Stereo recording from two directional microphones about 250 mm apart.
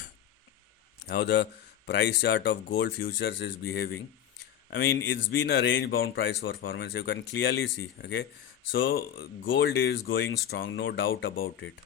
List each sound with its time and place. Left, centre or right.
1.0 s speech: left